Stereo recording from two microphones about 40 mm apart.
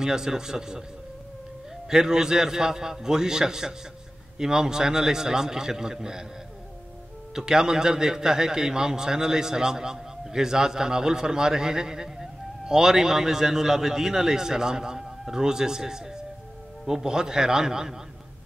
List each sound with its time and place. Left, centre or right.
0.0 s a man's voice: centre
1.9 s a man's voice: centre
7.3 s a man's voice: centre